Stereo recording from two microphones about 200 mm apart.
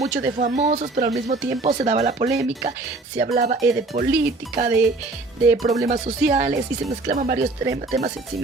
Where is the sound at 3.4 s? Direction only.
35° right (ahead or behind).